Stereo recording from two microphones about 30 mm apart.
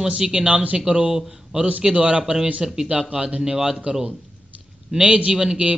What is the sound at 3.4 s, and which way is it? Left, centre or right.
Speech, centre.